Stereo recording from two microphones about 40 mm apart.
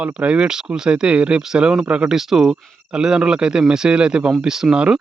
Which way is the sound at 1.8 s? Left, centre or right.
Right.